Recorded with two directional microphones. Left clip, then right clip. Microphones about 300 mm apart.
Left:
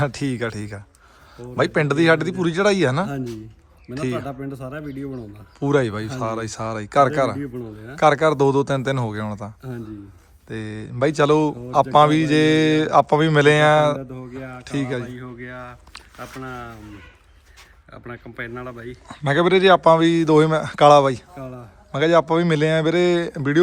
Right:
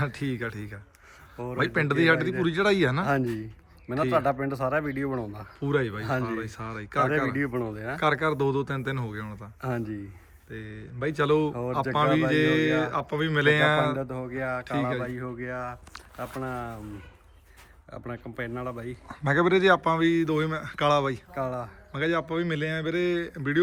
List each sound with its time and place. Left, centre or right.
0.0 s speech: centre
5.5 s speech: centre
9.6 s speech: right
10.5 s speech: centre
15.0 s speech: centre
16.2 s speech: right
17.9 s speech: centre
19.0 s speech: centre